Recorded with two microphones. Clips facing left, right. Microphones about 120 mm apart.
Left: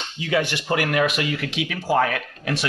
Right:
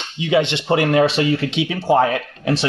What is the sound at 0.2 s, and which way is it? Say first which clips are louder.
Speech: right 6 dB; 20° right (ahead or behind).